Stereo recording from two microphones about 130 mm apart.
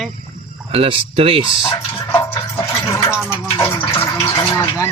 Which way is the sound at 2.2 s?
20° left (ahead or behind).